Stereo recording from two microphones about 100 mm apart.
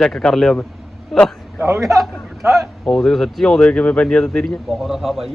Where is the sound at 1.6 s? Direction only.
30° right (ahead or behind).